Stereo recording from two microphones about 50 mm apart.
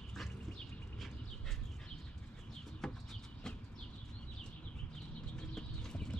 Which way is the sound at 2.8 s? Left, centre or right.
Centre.